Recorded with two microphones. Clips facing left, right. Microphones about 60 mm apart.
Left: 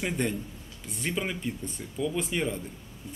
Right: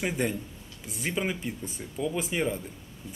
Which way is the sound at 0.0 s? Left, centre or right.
Centre.